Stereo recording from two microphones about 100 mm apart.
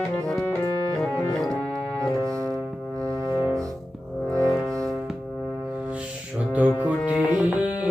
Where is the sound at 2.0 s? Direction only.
30° right (ahead or behind).